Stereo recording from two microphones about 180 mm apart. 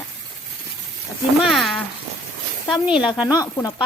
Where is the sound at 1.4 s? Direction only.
Centre (ahead or behind).